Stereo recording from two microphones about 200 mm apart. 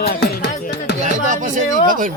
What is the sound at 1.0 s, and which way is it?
Music, 40° right (ahead or behind).